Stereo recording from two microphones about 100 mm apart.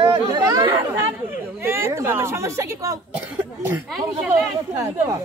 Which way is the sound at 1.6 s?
25° right (ahead or behind).